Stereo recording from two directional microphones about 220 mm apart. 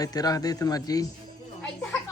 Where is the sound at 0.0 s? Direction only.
15° left (ahead or behind).